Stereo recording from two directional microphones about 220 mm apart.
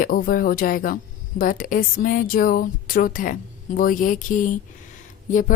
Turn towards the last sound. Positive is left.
turn(degrees=35)  # may be behind; listen again after turning